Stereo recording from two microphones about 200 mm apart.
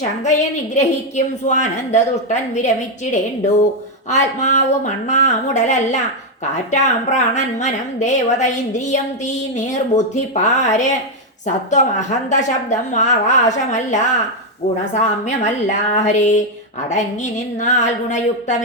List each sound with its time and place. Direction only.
0.3 s a woman's voice: 35° left (ahead or behind)
4.1 s a woman's voice: 35° left (ahead or behind)
15.0 s a woman's voice: 35° left (ahead or behind)